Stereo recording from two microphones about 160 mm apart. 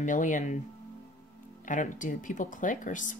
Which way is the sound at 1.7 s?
55° left (ahead or behind).